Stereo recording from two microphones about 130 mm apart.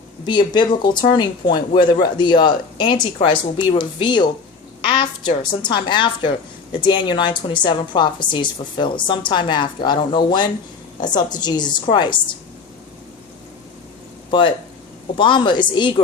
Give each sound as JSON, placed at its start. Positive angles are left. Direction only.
{"t": 0.3, "sound": "a woman's voice", "side_deg": 35}
{"t": 14.3, "sound": "a woman's voice", "side_deg": 40}